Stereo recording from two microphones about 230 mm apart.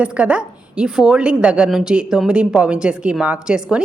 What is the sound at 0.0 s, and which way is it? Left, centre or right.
A woman's voice, centre.